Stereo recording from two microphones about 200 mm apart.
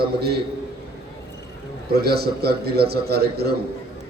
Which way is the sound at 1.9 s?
50° right (ahead or behind).